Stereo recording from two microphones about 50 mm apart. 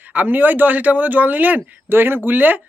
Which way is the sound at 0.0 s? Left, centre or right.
Right.